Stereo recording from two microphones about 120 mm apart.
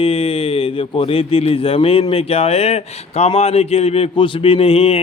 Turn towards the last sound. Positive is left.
turn(degrees=55)  # may be behind; listen again after turning